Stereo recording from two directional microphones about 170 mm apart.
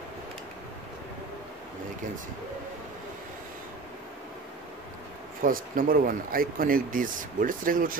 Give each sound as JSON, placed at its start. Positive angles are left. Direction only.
{"t": 5.4, "sound": "speech", "side_deg": -55}